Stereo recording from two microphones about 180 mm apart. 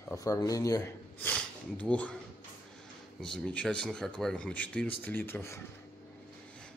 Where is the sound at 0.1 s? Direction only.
20° left (ahead or behind).